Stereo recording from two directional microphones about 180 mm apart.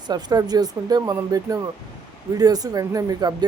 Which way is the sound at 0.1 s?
20° right (ahead or behind).